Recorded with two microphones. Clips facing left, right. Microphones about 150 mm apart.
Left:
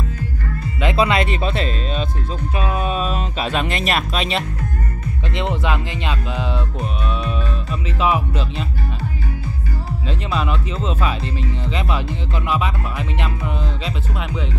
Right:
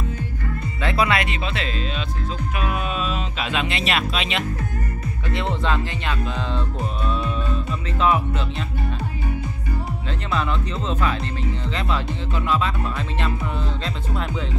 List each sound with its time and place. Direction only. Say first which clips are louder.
0.7 s speech: left 4 dB; 20° left (ahead or behind)
1.4 s speech: left 5 dB; 40° left (ahead or behind)
2.6 s speech: left 4 dB; 30° left (ahead or behind)
5.3 s speech: left 1 dB; 15° left (ahead or behind)
8.0 s speech: left 1 dB; 15° left (ahead or behind)
10.3 s speech: even; 15° left (ahead or behind)
12.4 s speech: left 1 dB; 15° left (ahead or behind)